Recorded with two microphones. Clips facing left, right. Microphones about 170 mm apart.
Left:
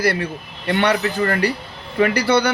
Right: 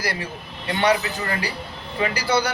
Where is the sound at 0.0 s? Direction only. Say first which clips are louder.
Left 8 dB; 60° left (ahead or behind).